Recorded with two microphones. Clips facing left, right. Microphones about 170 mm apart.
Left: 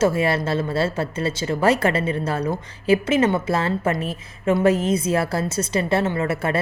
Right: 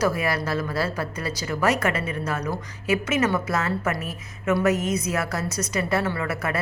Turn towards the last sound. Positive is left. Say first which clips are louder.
# left 4 dB
turn(degrees=25)  # may be behind; listen again after turning